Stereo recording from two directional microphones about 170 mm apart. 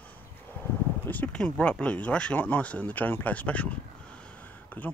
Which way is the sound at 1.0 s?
10° left (ahead or behind).